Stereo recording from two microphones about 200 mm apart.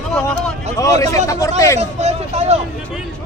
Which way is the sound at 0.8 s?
15° left (ahead or behind).